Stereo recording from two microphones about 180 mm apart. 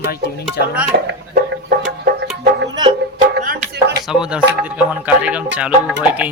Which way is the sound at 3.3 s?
60° right (ahead or behind).